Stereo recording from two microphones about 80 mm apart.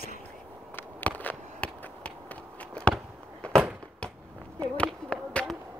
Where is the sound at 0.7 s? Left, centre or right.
Left.